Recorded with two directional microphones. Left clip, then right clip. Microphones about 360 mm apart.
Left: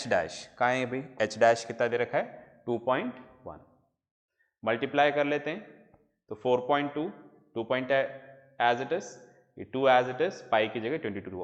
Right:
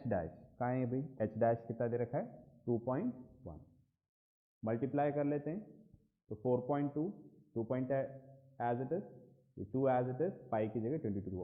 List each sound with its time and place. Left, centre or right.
0.0 s a man's voice: centre
4.6 s a man's voice: centre
6.7 s speech: centre
7.7 s a man's voice: centre